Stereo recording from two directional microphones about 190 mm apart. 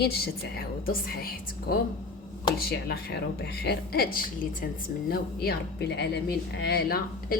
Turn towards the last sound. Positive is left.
turn(degrees=55)  # may be behind; listen again after turning